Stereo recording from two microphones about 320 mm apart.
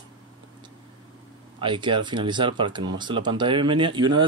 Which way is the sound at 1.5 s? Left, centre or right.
Centre.